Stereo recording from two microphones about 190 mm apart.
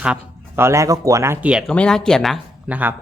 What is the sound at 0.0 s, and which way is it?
Speech, 10° right (ahead or behind).